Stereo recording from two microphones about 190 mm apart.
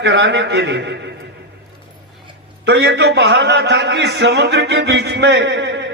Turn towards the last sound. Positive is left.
turn(degrees=-65)  # may be behind; listen again after turning